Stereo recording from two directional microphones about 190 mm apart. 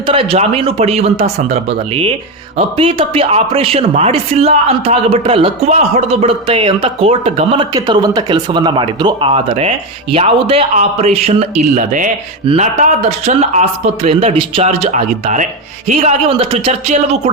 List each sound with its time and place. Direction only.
0.0 s speech: 30° right (ahead or behind)